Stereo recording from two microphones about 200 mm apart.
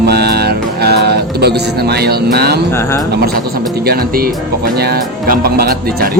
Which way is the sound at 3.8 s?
50° right (ahead or behind).